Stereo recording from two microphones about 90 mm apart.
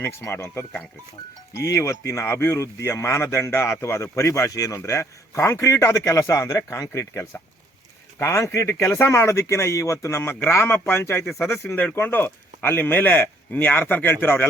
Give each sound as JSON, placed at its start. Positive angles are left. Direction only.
{"t": 0.0, "sound": "speech", "side_deg": 30}